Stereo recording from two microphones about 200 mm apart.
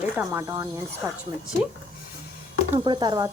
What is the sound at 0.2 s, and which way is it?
Speech, 15° right (ahead or behind).